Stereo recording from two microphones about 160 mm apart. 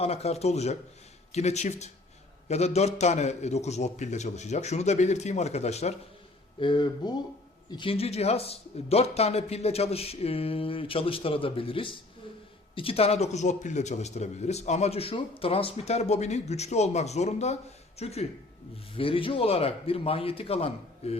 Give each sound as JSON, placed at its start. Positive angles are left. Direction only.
{"t": 0.0, "sound": "a man's voice", "side_deg": 40}
{"t": 6.6, "sound": "a man's voice", "side_deg": 30}